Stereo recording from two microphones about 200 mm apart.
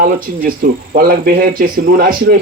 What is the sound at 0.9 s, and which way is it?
Speech, 50° right (ahead or behind).